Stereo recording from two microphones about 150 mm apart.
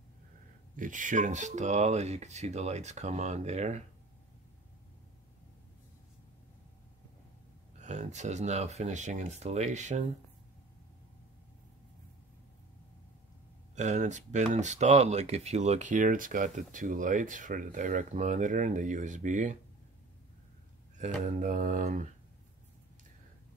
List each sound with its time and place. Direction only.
0.7 s speech: 60° right (ahead or behind)
7.8 s speech: 50° right (ahead or behind)
13.7 s speech: 55° right (ahead or behind)
21.0 s speech: 60° right (ahead or behind)